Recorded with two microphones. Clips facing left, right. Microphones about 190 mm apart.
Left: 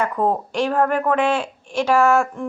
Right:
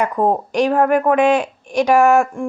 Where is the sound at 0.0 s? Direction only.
15° right (ahead or behind).